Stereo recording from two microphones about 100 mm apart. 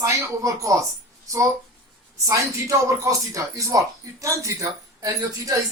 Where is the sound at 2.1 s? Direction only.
35° right (ahead or behind).